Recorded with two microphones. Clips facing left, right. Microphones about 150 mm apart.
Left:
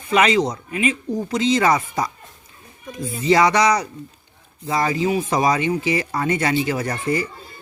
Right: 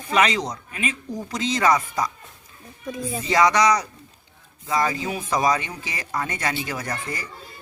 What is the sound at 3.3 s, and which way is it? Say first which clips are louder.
Speech: left 3 dB; 30° left (ahead or behind).